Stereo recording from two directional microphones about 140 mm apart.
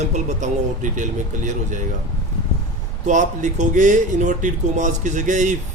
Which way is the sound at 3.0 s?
60° right (ahead or behind).